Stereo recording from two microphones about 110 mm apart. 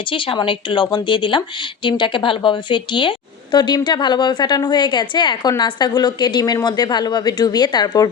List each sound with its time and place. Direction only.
0.1 s a woman's voice: 50° left (ahead or behind)